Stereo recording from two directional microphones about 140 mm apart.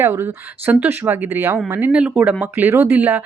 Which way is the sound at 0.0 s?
15° right (ahead or behind).